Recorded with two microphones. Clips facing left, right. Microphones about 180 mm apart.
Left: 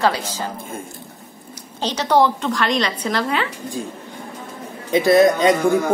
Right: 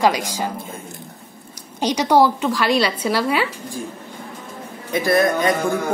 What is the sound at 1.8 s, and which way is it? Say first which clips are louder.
A woman's voice: right 1 dB; 10° right (ahead or behind).